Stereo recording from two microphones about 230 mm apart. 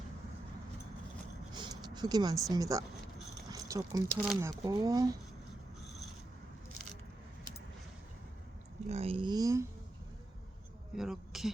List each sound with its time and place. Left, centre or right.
1.6 s speech: centre
8.9 s speech: right
10.9 s speech: centre